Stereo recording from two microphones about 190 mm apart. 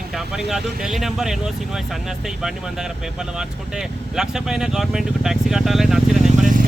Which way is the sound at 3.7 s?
5° right (ahead or behind).